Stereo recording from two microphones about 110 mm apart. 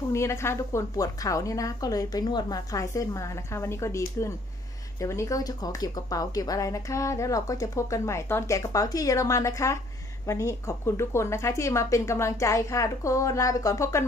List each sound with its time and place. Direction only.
0.1 s a woman's voice: 25° left (ahead or behind)